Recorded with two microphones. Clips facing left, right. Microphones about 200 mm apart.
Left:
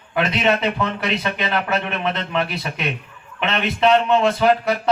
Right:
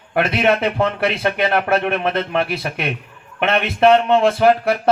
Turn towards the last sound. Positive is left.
turn(degrees=-55)  # may be behind; listen again after turning